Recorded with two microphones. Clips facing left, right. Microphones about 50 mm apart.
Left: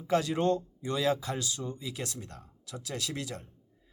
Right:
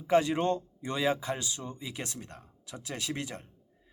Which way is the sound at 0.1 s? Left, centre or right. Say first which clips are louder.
Right 1 dB; right.